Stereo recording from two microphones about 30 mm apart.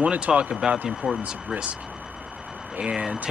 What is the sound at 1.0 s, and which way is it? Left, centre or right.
Speech, right.